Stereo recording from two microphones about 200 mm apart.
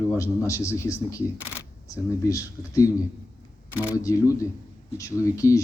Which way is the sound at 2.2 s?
15° left (ahead or behind).